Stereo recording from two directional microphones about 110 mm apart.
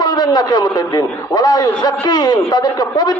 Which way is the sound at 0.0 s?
40° left (ahead or behind).